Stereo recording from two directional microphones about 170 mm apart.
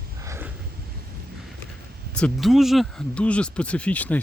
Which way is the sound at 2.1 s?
5° left (ahead or behind).